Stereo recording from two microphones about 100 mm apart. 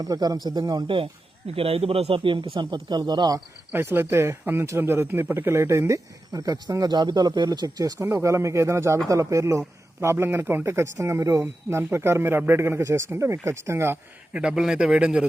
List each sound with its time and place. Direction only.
0.0 s a man's voice: 40° right (ahead or behind)
1.5 s speech: 75° right (ahead or behind); by 2.5 s 60° right (ahead or behind)
2.6 s speech: 45° right (ahead or behind)
3.7 s speech: 20° right (ahead or behind); by 7.9 s 40° right (ahead or behind)
7.9 s a man's voice: 30° right (ahead or behind)
14.3 s a man's voice: 5° right (ahead or behind)